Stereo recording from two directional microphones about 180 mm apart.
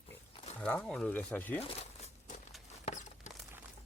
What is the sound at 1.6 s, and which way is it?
Crumpling, 35° left (ahead or behind).